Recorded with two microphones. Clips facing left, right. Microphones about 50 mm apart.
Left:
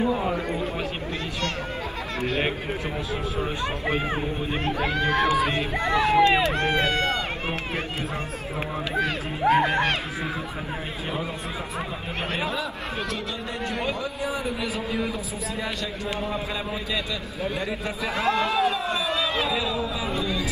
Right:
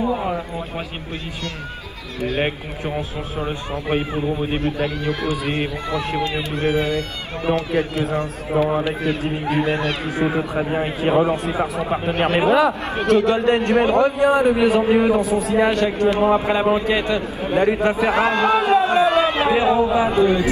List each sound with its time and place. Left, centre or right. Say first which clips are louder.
4.8 s speech: even; left
7.4 s speech: right 9 dB; right
9.4 s speech: left 6 dB; left
10.7 s a man's voice: right 14 dB; right
11.5 s a man's voice: right 10 dB; right